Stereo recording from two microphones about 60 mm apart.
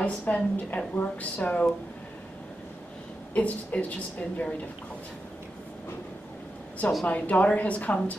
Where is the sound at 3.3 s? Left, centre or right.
Left.